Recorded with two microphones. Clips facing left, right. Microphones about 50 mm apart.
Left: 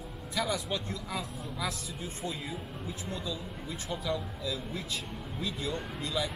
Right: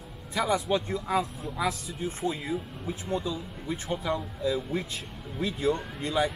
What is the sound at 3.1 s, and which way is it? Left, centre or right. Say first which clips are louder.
Speech: right 9 dB; right.